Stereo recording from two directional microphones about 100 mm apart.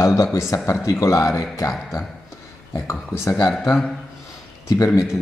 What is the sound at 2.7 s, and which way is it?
Speech, 30° left (ahead or behind).